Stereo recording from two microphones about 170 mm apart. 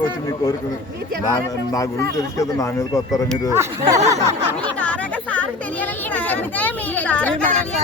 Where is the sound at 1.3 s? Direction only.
20° left (ahead or behind).